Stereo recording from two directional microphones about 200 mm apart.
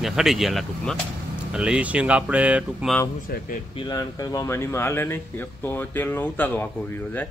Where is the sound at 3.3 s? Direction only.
50° left (ahead or behind).